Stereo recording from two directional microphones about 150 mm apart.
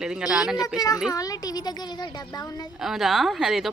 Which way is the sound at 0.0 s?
5° right (ahead or behind).